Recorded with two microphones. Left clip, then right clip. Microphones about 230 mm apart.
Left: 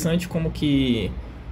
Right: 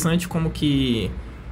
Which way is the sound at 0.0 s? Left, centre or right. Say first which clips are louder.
Right 1 dB; centre.